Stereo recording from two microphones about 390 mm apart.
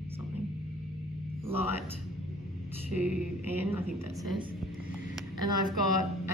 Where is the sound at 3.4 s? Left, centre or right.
Centre.